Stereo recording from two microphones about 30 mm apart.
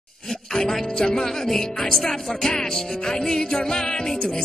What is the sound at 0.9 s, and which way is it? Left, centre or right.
Speech, left.